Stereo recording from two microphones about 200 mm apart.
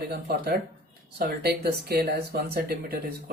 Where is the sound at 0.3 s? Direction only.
50° right (ahead or behind).